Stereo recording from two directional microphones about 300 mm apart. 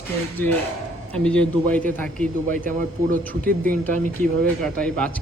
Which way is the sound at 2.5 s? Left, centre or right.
Right.